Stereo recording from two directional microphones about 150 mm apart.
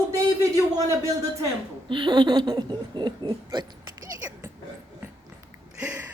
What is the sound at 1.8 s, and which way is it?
Speech, 35° right (ahead or behind).